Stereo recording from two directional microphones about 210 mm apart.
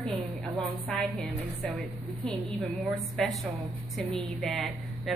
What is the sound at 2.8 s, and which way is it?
A woman's voice, centre (ahead or behind).